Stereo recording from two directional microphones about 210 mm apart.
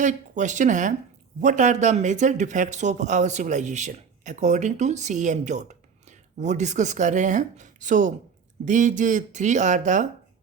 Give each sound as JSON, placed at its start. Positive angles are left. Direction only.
{"t": 0.0, "sound": "speech", "side_deg": -35}